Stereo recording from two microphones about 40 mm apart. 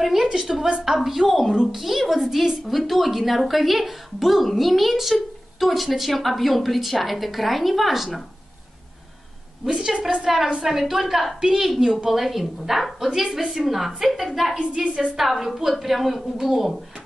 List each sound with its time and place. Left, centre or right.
0.0 s a woman's voice: centre
9.7 s a woman's voice: right; by 16.8 s centre